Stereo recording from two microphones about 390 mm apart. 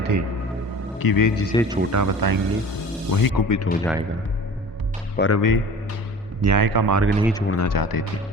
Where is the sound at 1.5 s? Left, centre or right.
Centre.